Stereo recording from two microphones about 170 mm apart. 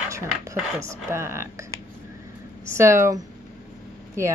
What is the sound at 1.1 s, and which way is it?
Speech, 15° right (ahead or behind).